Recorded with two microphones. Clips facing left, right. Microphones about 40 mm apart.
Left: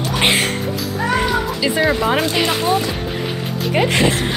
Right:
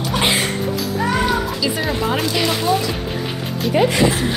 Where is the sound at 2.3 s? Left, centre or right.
Left.